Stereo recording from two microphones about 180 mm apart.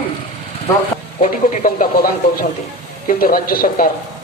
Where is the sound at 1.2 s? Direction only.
45° left (ahead or behind).